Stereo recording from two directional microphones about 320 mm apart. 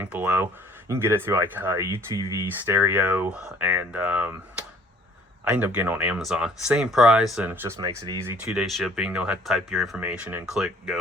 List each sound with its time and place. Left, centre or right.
0.0 s speech: centre